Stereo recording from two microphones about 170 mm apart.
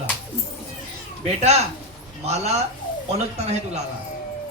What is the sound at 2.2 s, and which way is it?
Speech, 40° right (ahead or behind).